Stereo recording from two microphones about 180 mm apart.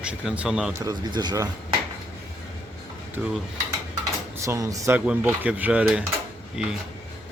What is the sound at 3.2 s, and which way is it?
Speech, 10° right (ahead or behind).